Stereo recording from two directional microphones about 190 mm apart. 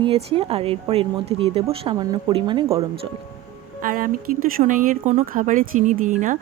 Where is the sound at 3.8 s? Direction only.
45° right (ahead or behind).